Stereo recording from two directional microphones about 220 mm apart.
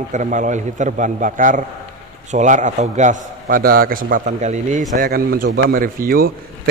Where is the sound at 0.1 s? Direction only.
35° right (ahead or behind).